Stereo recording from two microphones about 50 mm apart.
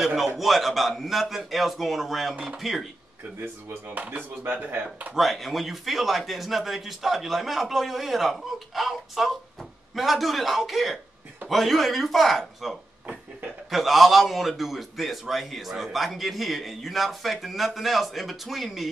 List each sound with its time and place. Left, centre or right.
0.0 s a man's voice: centre
3.9 s speech: right
5.1 s a man's voice: centre